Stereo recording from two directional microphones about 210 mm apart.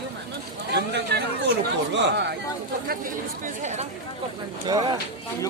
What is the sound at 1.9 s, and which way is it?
Speech, 55° right (ahead or behind).